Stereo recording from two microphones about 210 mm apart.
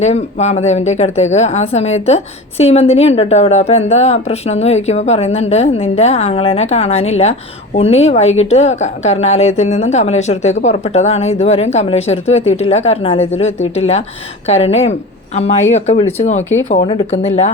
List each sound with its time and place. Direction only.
0.0 s a woman's voice: 30° left (ahead or behind)